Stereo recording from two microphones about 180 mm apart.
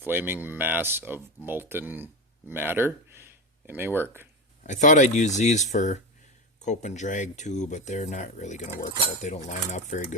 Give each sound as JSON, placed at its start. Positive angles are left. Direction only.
{"t": 0.0, "sound": "speech", "side_deg": -10}
{"t": 4.6, "sound": "speech", "side_deg": 45}